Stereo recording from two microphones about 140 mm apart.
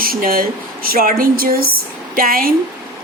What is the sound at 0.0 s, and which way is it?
A woman's voice, 90° right.